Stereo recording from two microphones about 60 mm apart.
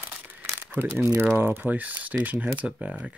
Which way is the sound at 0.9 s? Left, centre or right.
Right.